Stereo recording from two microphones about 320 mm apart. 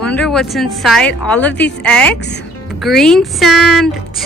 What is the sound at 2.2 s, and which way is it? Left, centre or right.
Speech, left.